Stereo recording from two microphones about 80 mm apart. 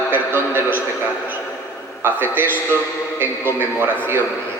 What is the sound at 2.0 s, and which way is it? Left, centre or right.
A man's voice, right.